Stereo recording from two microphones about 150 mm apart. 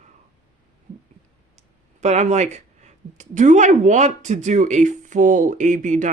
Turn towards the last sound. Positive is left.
turn(degrees=-55)  # may be behind; listen again after turning